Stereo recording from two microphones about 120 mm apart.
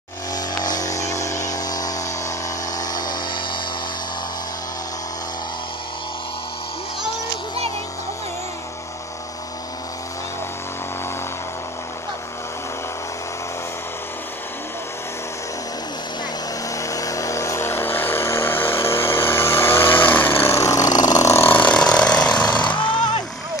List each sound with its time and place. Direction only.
0.6 s a sound: 30° left (ahead or behind)
16.7 s vehicle: 25° left (ahead or behind)
21.7 s ratchet: 5° left (ahead or behind)
22.4 s jackhammer: 35° left (ahead or behind)
22.7 s vehicle: 15° left (ahead or behind)